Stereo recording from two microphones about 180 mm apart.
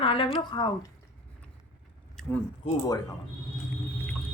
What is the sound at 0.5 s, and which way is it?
Speech, 25° left (ahead or behind).